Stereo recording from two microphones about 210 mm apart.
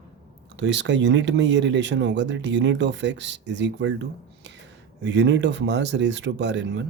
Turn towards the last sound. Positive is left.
turn(degrees=-55)  # may be behind; listen again after turning